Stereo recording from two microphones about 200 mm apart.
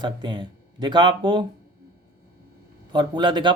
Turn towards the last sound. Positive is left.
turn(degrees=-25)  # may be behind; listen again after turning